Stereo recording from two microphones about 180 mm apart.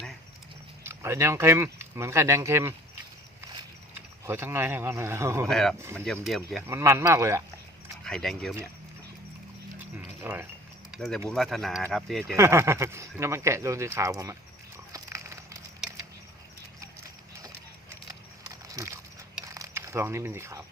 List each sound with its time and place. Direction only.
0.9 s speech: 15° right (ahead or behind)
4.3 s speech: 15° right (ahead or behind)
5.5 s speech: 5° left (ahead or behind)
6.6 s speech: 15° right (ahead or behind)
8.0 s speech: 5° left (ahead or behind)
9.7 s dog: 10° right (ahead or behind)
10.9 s speech: centre (ahead or behind)
12.4 s speech: 15° right (ahead or behind)
14.9 s a sound: 15° right (ahead or behind)
18.1 s a sound: 20° right (ahead or behind)
19.5 s speech: 15° right (ahead or behind)